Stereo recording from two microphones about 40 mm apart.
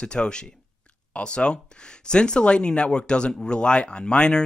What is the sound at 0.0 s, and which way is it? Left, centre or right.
Speech, left.